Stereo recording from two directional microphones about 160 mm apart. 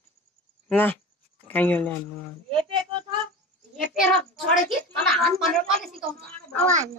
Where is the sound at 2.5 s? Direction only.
30° right (ahead or behind).